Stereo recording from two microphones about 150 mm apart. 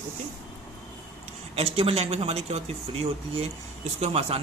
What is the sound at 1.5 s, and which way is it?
A man's voice, 40° right (ahead or behind).